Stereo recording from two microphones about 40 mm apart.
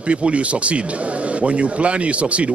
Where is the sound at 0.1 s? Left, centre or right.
Right.